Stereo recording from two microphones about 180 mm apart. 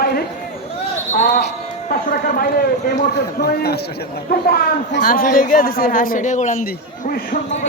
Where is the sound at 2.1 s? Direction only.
55° left (ahead or behind).